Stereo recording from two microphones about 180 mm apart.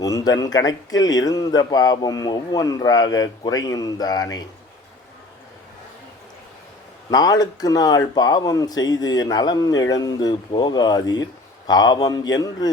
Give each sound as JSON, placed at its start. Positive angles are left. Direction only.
{"t": 0.0, "sound": "speech", "side_deg": 20}
{"t": 7.1, "sound": "speech", "side_deg": 20}